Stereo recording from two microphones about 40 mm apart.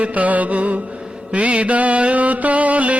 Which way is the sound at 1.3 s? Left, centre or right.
Right.